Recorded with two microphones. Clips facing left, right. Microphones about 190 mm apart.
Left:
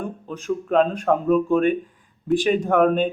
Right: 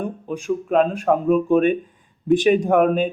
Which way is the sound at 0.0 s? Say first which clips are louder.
Right 4 dB; 10° right (ahead or behind).